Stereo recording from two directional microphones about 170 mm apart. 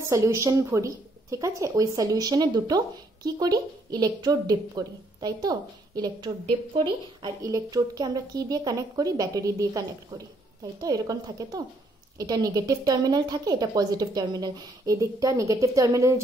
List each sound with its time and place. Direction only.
0.0 s a woman's voice: 15° right (ahead or behind)